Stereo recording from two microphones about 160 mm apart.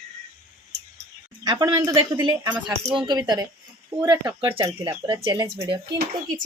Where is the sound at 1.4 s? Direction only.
25° right (ahead or behind).